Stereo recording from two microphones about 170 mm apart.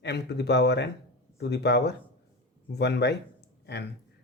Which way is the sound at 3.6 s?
75° left (ahead or behind).